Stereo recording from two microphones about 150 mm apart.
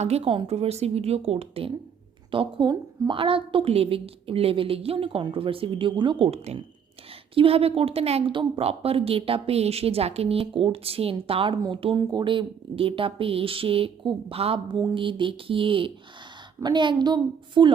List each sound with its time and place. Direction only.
0.0 s a woman's voice: 40° right (ahead or behind)